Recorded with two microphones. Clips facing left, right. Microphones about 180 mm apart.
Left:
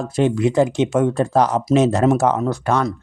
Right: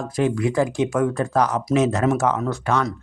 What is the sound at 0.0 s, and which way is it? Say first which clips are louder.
Speech: left 4 dB; 25° left (ahead or behind).